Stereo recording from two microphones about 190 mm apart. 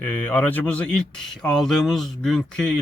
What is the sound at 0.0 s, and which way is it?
Speech, 10° left (ahead or behind).